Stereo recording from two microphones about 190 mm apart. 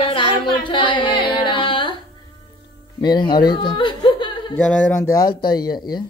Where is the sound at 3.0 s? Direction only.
25° left (ahead or behind).